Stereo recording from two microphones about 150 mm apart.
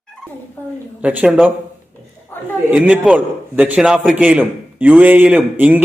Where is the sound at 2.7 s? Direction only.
10° right (ahead or behind).